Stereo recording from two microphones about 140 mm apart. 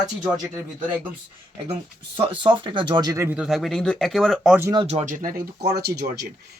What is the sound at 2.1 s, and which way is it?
Speech, 35° right (ahead or behind).